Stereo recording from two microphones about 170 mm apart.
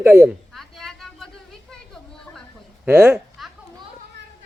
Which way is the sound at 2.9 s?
15° right (ahead or behind).